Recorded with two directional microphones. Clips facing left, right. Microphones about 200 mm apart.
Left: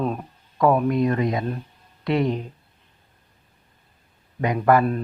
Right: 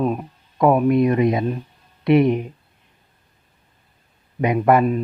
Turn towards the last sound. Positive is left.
turn(degrees=-20)  # may be behind; listen again after turning